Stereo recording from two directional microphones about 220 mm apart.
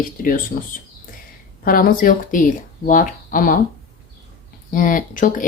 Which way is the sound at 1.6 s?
40° left (ahead or behind).